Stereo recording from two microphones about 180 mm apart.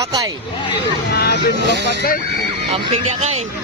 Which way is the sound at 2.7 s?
35° right (ahead or behind).